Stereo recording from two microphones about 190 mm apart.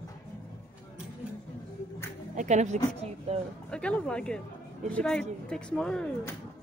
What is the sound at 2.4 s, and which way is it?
Speech, 40° right (ahead or behind).